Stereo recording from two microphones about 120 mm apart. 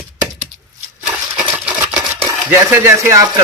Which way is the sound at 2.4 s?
20° right (ahead or behind).